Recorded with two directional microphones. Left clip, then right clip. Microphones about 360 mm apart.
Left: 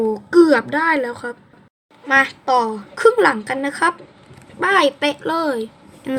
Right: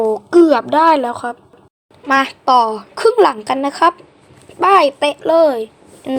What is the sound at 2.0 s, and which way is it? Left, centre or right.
A woman's voice, right.